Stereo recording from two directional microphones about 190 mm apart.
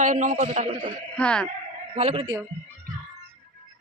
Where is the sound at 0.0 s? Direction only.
40° right (ahead or behind).